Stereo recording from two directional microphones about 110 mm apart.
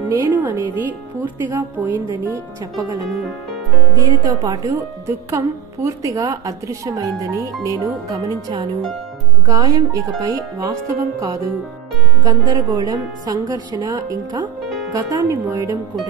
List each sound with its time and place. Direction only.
0.1 s a woman's voice: 20° right (ahead or behind)
2.3 s a woman's voice: 35° right (ahead or behind)